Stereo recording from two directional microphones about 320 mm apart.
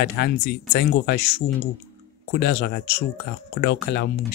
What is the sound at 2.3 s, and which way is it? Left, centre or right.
Speech, left.